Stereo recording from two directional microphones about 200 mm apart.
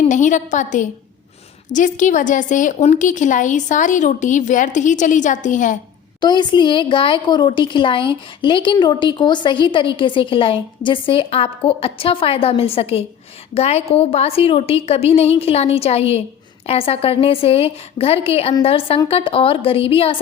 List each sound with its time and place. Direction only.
0.1 s a woman's voice: 40° left (ahead or behind)
6.1 s a woman's voice: 20° left (ahead or behind)